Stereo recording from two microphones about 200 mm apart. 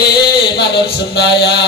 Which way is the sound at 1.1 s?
60° left (ahead or behind).